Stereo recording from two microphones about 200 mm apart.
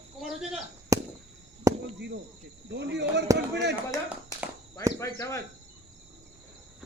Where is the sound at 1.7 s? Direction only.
15° right (ahead or behind).